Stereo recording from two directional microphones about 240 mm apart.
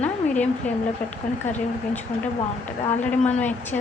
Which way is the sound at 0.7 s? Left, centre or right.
Centre.